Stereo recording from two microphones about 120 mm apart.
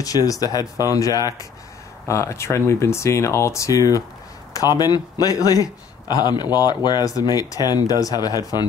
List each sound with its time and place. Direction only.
0.0 s speech: 30° left (ahead or behind)